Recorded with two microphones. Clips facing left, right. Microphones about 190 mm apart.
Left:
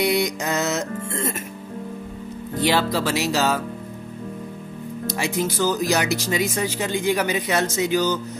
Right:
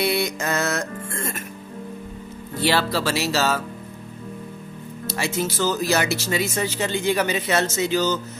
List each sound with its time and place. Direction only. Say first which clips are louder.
0.0 s music: left 2 dB; 15° left (ahead or behind)
2.6 s speech: left 1 dB; 15° left (ahead or behind)
5.0 s speech: left 1 dB; 15° left (ahead or behind)